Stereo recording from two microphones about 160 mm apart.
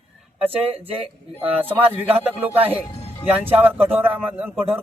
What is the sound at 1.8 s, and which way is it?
Speech, 35° right (ahead or behind).